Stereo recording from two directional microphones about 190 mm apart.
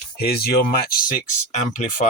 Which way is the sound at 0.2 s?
55° left (ahead or behind).